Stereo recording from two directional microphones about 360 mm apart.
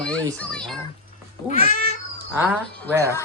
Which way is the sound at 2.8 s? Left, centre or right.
Centre.